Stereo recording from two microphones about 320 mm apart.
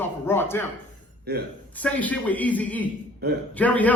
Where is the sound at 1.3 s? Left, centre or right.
Right.